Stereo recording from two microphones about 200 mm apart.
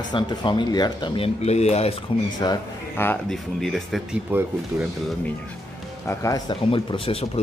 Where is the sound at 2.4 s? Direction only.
15° left (ahead or behind).